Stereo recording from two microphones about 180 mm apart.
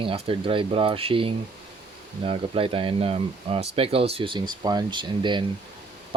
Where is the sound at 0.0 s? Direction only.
30° right (ahead or behind).